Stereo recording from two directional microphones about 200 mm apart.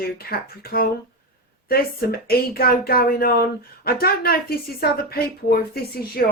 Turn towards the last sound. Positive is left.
turn(degrees=50)  # may be behind; listen again after turning